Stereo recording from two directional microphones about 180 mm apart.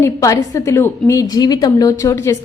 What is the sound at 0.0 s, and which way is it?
A woman's voice, 15° left (ahead or behind).